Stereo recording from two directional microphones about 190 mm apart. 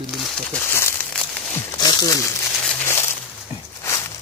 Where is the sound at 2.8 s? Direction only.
15° left (ahead or behind).